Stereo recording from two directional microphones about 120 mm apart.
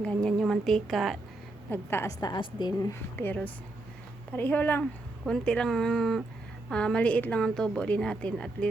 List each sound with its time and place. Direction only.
0.0 s a woman's voice: 10° left (ahead or behind)
1.7 s a woman's voice: 20° left (ahead or behind)
2.2 s a woman's voice: 40° left (ahead or behind)
3.2 s a woman's voice: 15° left (ahead or behind)